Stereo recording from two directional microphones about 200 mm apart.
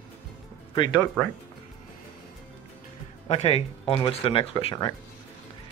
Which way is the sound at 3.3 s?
30° left (ahead or behind).